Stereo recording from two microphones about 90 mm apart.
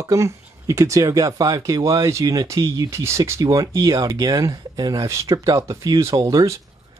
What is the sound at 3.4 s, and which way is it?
Speech, 40° right (ahead or behind).